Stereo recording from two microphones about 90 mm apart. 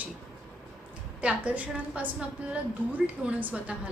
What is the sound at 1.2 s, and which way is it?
A woman's voice, 15° right (ahead or behind).